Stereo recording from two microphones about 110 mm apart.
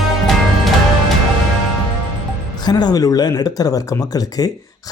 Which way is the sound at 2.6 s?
40° left (ahead or behind).